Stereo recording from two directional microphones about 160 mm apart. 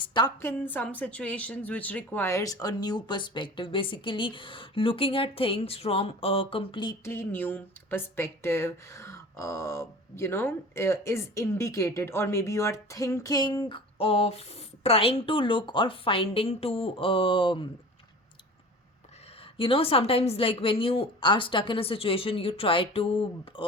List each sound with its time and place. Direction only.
0.0 s a woman's voice: 30° left (ahead or behind)
0.4 s a woman's voice: 10° left (ahead or behind); by 6.9 s 30° left (ahead or behind)
7.0 s a woman's voice: 15° left (ahead or behind); by 17.7 s 30° left (ahead or behind)
19.5 s a woman's voice: 35° left (ahead or behind)